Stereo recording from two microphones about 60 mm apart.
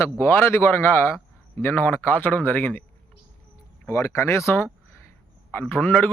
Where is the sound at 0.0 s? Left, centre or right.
Left.